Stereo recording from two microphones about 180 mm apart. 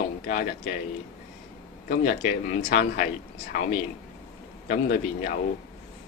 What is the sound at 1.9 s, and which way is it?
Speech, 50° left (ahead or behind).